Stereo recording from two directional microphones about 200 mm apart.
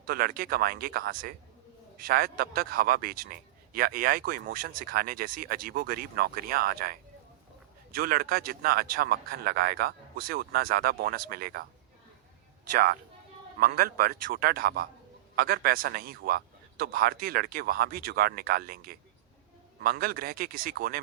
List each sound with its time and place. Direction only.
0.0 s a man's voice: 45° right (ahead or behind)
7.9 s a man's voice: 50° right (ahead or behind)
13.6 s a man's voice: 50° right (ahead or behind)